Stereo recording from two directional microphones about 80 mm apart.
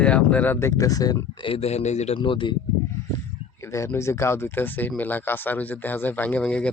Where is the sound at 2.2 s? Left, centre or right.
Left.